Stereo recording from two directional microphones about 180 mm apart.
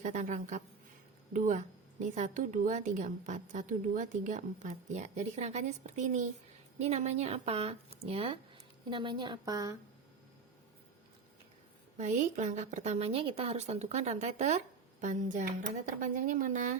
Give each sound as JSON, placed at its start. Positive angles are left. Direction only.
{"t": 0.0, "sound": "a woman's voice", "side_deg": -45}
{"t": 11.9, "sound": "a woman's voice", "side_deg": -40}